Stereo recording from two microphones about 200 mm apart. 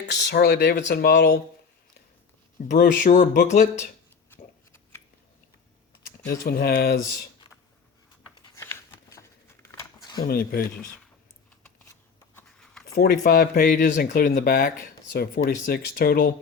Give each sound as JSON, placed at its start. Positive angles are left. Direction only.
{"t": 0.1, "sound": "speech", "side_deg": 60}
{"t": 2.6, "sound": "speech", "side_deg": 45}
{"t": 4.3, "sound": "a sound", "side_deg": 10}
{"t": 6.5, "sound": "speech", "side_deg": 50}
{"t": 8.4, "sound": "a sound", "side_deg": 25}
{"t": 8.6, "sound": "a sound", "side_deg": 15}
{"t": 10.2, "sound": "speech", "side_deg": 50}
{"t": 12.3, "sound": "writing", "side_deg": 5}
{"t": 13.2, "sound": "speech", "side_deg": 45}